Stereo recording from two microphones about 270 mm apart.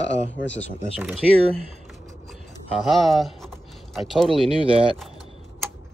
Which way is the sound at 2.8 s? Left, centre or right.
Centre.